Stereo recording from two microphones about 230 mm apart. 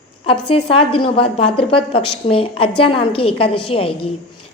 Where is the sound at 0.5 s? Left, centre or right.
Left.